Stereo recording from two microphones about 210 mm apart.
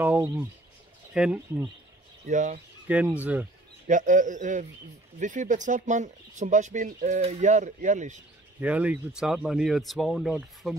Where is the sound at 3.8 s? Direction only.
35° right (ahead or behind).